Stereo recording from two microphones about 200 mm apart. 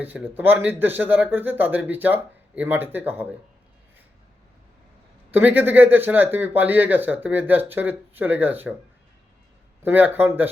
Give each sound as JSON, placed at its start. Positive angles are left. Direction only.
{"t": 0.0, "sound": "speech", "side_deg": -10}
{"t": 5.3, "sound": "speech", "side_deg": -10}
{"t": 9.8, "sound": "speech", "side_deg": -10}